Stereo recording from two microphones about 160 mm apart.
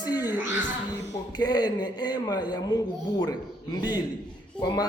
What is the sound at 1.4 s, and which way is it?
A child's voice, 25° left (ahead or behind).